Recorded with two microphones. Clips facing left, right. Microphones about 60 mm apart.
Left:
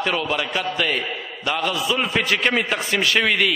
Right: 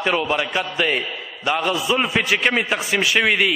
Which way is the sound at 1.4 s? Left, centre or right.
Right.